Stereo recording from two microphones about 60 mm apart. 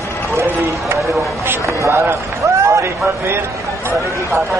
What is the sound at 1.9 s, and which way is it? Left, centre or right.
Speech, right.